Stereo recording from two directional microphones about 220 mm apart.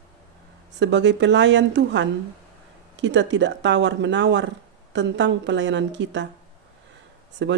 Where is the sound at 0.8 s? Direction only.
55° right (ahead or behind).